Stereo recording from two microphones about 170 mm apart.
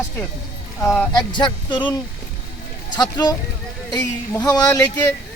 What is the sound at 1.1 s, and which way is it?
Speech, 25° left (ahead or behind).